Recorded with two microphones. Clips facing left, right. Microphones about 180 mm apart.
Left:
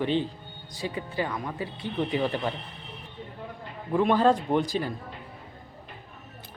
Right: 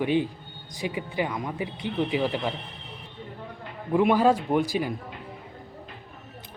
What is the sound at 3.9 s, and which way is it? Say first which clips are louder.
A man's voice: right 1 dB; 10° right (ahead or behind).